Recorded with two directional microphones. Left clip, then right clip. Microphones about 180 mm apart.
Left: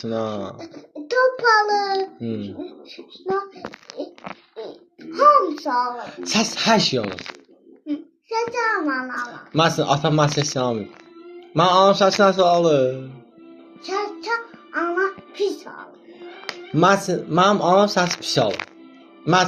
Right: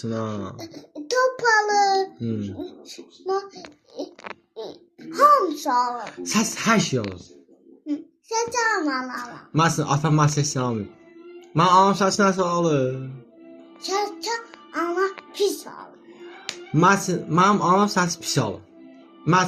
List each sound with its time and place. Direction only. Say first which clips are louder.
0.0 s speech: left 4 dB; 35° right (ahead or behind)
0.5 s child singing: left 1 dB; 10° right (ahead or behind)
2.6 s speech: left 1 dB; 10° right (ahead or behind)
4.5 s babbling: left 1 dB; 10° right (ahead or behind)
6.1 s speech: left 7 dB; 40° right (ahead or behind)
8.4 s a child's voice: left 1 dB; 10° right (ahead or behind)
9.5 s speech: left 3 dB; 40° right (ahead or behind)
13.8 s music: even; 5° right (ahead or behind)
16.7 s speech: left 2 dB; 45° right (ahead or behind)